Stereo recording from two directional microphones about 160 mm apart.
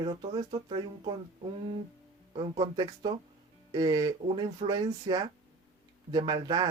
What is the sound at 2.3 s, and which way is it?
Speech, 25° right (ahead or behind).